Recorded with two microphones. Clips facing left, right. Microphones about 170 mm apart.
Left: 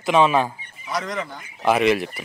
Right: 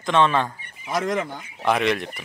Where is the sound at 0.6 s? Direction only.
50° right (ahead or behind).